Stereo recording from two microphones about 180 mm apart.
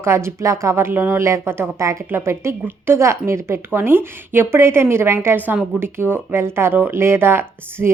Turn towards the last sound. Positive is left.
turn(degrees=-15)  # may be behind; listen again after turning